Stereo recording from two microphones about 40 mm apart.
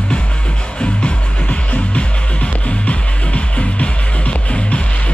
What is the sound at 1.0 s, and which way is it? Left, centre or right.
Music, left.